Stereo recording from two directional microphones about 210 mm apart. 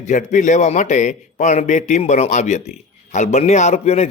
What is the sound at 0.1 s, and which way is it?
A man's voice, 35° left (ahead or behind).